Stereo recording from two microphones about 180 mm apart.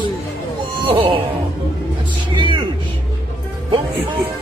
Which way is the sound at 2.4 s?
25° right (ahead or behind).